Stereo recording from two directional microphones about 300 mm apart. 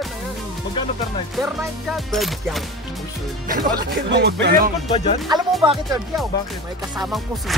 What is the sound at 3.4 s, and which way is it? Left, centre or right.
Speech, right.